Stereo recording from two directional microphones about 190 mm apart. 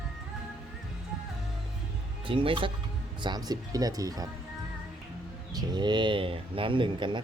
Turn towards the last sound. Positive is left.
turn(degrees=-25)  # may be behind; listen again after turning